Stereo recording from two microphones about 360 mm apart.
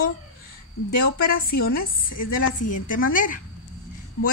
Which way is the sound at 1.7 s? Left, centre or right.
Left.